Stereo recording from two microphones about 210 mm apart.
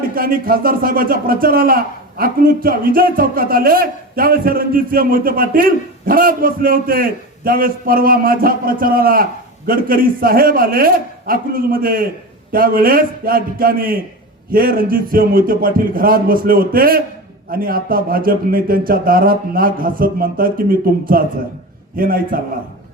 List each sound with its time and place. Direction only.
0.1 s speech: 45° right (ahead or behind)